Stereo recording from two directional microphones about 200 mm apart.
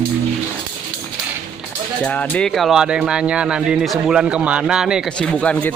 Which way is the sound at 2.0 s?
5° left (ahead or behind).